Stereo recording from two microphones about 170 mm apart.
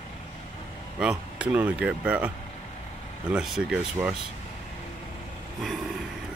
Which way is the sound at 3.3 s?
5° right (ahead or behind).